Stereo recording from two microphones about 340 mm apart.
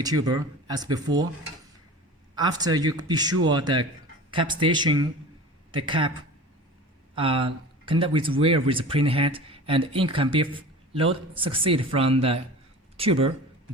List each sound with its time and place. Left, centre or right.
0.0 s speech: centre
2.3 s speech: centre
7.2 s speech: centre